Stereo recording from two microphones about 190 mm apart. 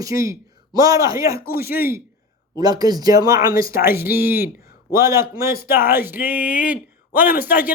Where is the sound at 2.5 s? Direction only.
20° right (ahead or behind).